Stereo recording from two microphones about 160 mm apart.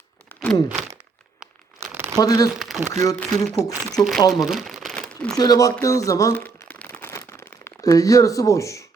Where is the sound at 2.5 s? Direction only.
Centre (ahead or behind).